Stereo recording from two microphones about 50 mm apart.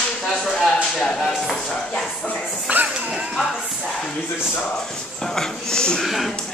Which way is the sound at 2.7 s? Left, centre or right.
Right.